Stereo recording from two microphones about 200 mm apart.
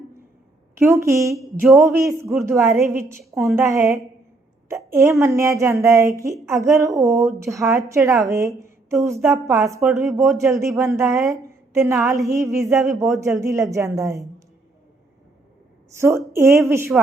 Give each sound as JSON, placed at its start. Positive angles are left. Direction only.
{"t": 0.8, "sound": "a woman's voice", "side_deg": -15}
{"t": 9.8, "sound": "speech", "side_deg": 0}
{"t": 10.5, "sound": "a woman's voice", "side_deg": -15}
{"t": 16.0, "sound": "speech", "side_deg": -15}